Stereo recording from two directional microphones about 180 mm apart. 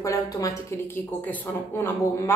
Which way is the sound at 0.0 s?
20° left (ahead or behind).